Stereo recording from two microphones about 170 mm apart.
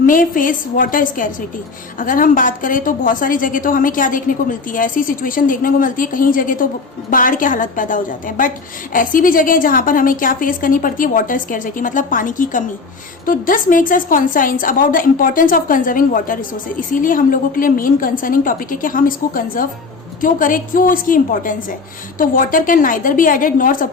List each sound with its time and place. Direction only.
0.0 s a woman's voice: 55° left (ahead or behind)